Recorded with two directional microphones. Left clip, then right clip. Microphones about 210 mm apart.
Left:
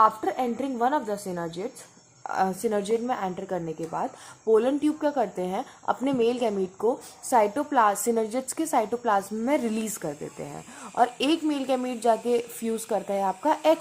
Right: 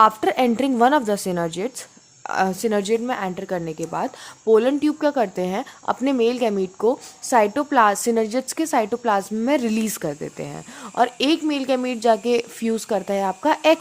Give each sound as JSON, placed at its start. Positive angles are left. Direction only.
{"t": 0.0, "sound": "a woman's voice", "side_deg": -35}